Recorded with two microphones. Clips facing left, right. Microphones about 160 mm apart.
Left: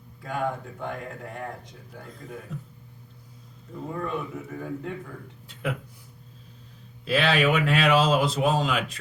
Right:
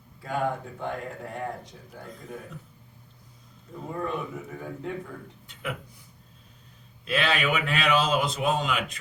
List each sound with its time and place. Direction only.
0.2 s a man's voice: centre (ahead or behind)
3.8 s a man's voice: centre (ahead or behind)
7.0 s a man's voice: centre (ahead or behind)
8.2 s a man's voice: 30° left (ahead or behind)
8.4 s a man's voice: centre (ahead or behind)